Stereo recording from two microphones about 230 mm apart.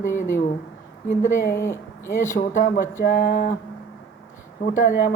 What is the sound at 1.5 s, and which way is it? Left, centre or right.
Speech, centre.